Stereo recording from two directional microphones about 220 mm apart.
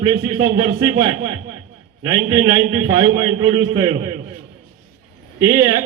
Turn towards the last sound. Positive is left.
turn(degrees=-20)  # may be behind; listen again after turning